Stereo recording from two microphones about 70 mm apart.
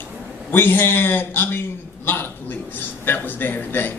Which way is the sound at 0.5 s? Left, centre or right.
Left.